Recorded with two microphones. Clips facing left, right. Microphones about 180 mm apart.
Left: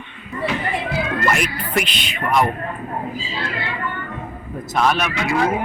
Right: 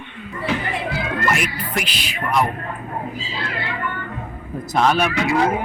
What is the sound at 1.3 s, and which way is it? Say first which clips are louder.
Speech: left 2 dB; centre (ahead or behind).